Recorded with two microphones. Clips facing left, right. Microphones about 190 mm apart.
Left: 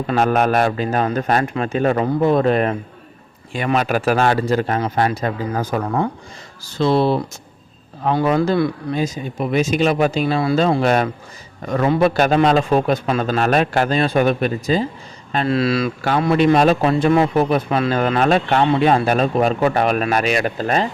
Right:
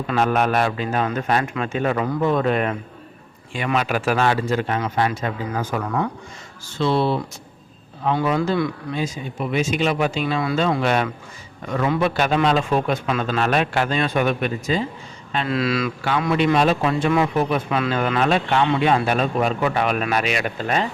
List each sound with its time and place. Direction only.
0.1 s speech: 45° left (ahead or behind)